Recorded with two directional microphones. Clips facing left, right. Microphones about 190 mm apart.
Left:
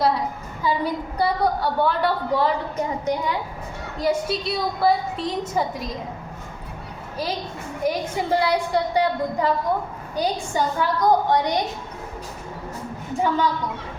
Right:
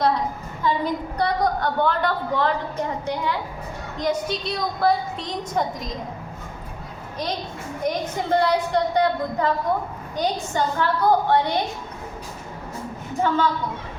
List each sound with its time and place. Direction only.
0.6 s a woman's voice: 5° left (ahead or behind)
7.9 s a woman's voice: 10° left (ahead or behind)
13.2 s a woman's voice: 15° left (ahead or behind)